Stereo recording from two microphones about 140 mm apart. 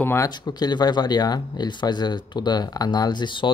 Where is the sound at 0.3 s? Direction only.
30° left (ahead or behind).